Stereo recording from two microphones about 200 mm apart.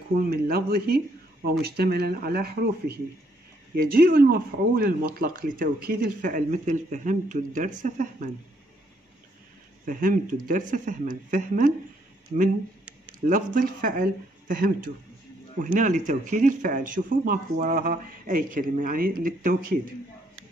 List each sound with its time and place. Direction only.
0.1 s speech: 45° right (ahead or behind)
9.8 s speech: 45° right (ahead or behind)
13.2 s speech: 45° right (ahead or behind)